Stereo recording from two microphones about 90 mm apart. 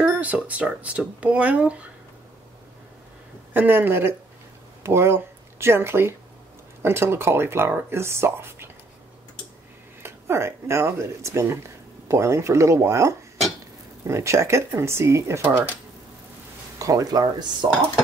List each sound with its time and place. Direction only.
0.2 s speech: 15° right (ahead or behind)
3.5 s speech: 20° right (ahead or behind)
10.0 s speech: 30° right (ahead or behind)
16.7 s speech: 40° right (ahead or behind)